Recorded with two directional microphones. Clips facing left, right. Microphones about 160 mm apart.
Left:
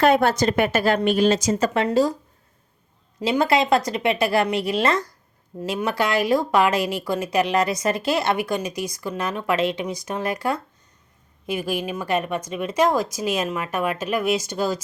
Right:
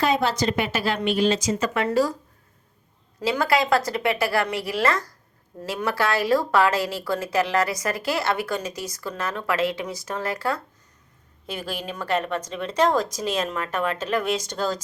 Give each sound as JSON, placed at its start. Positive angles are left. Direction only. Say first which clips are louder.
{"t": 0.0, "sound": "a woman's voice", "louder": "left 4 dB", "side_deg": 55}
{"t": 3.2, "sound": "a woman's voice", "louder": "left 2 dB", "side_deg": 20}